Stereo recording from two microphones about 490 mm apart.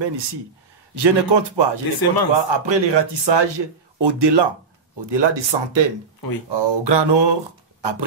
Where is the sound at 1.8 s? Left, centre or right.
Left.